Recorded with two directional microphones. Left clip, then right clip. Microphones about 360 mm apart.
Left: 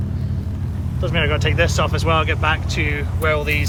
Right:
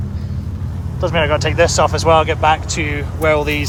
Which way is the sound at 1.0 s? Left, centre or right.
Centre.